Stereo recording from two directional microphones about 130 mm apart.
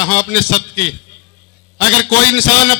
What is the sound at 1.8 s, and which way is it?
Speech, 25° left (ahead or behind).